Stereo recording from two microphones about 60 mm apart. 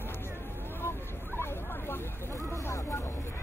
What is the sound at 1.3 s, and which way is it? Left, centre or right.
Hubbub, left.